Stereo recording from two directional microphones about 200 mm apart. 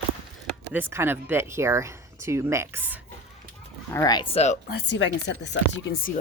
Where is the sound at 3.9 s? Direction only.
20° left (ahead or behind).